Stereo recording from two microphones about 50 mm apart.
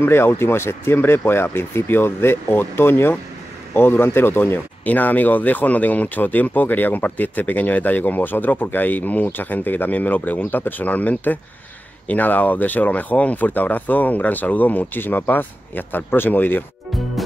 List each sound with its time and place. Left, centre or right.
0.0 s speech: left
4.8 s speech: left